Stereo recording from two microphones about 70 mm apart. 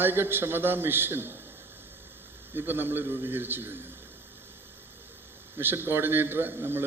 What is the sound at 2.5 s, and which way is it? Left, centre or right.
A man's voice, right.